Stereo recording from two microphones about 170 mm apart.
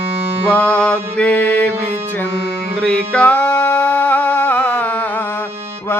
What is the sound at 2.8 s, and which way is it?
Music, 5° left (ahead or behind).